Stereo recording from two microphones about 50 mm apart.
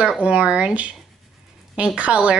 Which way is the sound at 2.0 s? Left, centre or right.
Right.